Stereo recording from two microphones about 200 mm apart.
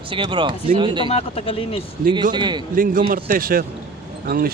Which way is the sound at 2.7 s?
45° right (ahead or behind).